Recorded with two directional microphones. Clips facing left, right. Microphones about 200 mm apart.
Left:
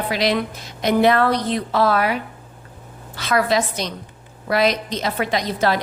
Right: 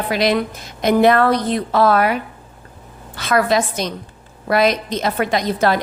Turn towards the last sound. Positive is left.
turn(degrees=-50)  # may be behind; listen again after turning